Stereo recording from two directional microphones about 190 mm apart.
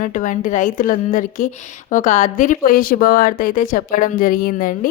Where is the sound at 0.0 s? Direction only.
45° left (ahead or behind).